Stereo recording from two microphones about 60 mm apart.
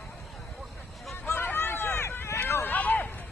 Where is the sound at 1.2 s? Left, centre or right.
Left.